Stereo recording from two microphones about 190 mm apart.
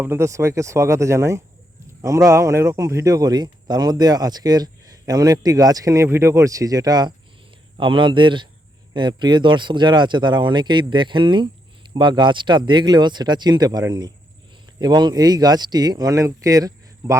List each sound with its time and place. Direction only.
0.0 s a man's voice: 15° right (ahead or behind)